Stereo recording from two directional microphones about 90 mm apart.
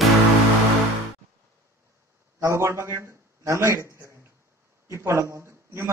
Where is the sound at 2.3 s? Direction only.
30° right (ahead or behind).